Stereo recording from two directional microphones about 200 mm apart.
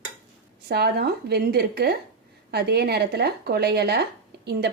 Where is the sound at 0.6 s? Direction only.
55° right (ahead or behind).